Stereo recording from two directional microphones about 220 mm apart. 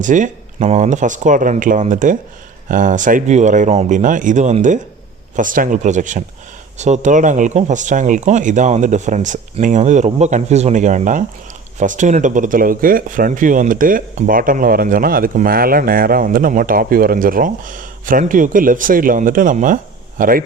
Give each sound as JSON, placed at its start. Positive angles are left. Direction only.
{"t": 0.0, "sound": "speech", "side_deg": -35}